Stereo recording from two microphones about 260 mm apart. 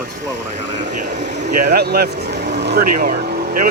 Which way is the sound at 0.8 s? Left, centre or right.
Right.